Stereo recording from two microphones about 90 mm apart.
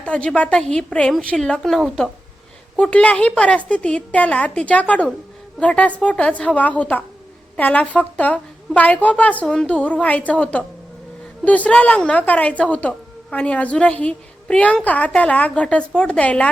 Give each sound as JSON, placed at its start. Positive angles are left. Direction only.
{"t": 0.0, "sound": "a woman's voice", "side_deg": 10}